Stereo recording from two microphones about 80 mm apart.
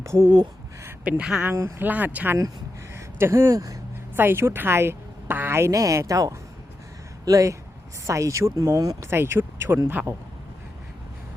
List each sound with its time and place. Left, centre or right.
0.0 s a woman's voice: right
1.2 s speech: centre
1.5 s a woman's voice: right
1.8 s speech: right
2.9 s speech: right
4.1 s a woman's voice: right
9.0 s speech: right